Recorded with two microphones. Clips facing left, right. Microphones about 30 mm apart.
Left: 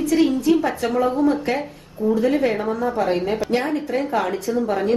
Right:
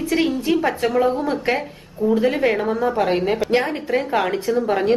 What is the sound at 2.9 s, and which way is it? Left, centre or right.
A woman's voice, right.